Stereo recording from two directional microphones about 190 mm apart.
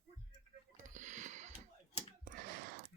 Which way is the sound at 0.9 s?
40° right (ahead or behind).